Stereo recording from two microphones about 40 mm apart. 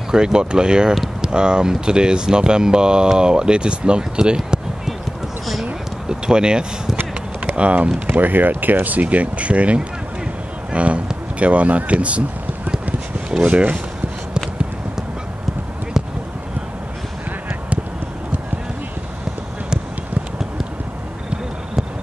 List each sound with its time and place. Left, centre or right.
0.1 s speech: centre
6.0 s a sound: right
7.3 s speech: right
8.1 s speech: right